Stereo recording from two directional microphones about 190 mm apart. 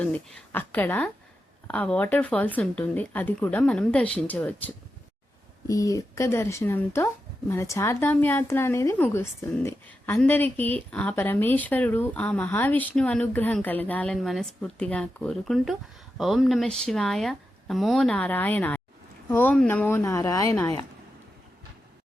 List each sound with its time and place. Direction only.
0.0 s speech: 5° left (ahead or behind)